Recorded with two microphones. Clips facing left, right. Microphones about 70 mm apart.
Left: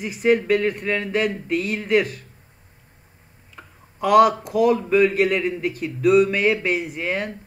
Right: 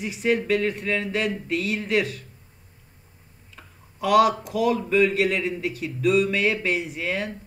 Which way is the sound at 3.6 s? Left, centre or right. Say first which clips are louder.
Left 5 dB; centre.